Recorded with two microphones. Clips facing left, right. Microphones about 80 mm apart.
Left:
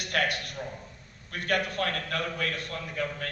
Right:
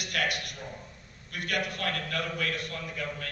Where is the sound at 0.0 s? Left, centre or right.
Left.